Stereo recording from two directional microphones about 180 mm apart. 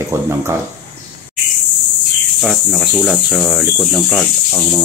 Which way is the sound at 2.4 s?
Centre (ahead or behind).